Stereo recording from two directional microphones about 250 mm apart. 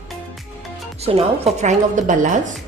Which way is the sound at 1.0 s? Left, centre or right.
Right.